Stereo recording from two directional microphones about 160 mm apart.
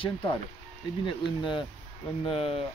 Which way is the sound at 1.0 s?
30° left (ahead or behind).